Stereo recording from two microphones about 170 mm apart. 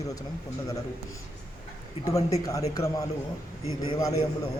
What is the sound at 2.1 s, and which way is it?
Speech, 20° left (ahead or behind).